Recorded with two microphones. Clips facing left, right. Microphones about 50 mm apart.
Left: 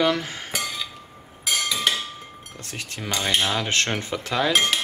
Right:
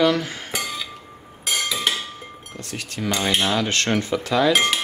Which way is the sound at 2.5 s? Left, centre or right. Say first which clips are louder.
Right 3 dB; left.